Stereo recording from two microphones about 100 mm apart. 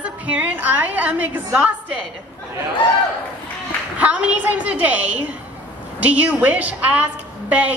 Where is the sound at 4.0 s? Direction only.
15° right (ahead or behind).